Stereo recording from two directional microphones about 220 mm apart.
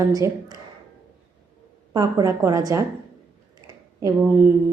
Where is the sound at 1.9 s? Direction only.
15° right (ahead or behind).